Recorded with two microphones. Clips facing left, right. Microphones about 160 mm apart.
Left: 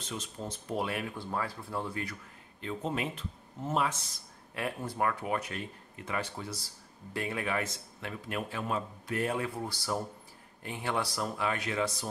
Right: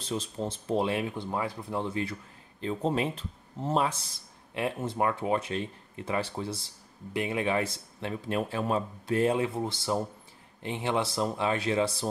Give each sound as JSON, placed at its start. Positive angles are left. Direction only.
{"t": 0.0, "sound": "speech", "side_deg": -30}